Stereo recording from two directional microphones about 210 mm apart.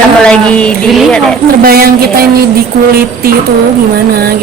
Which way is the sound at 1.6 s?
45° right (ahead or behind).